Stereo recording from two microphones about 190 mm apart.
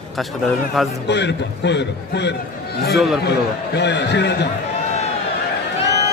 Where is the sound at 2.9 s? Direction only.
Centre (ahead or behind).